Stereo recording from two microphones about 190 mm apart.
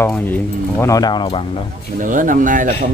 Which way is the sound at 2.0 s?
45° right (ahead or behind).